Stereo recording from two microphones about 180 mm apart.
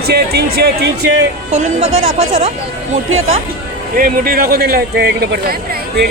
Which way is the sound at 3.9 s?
55° right (ahead or behind).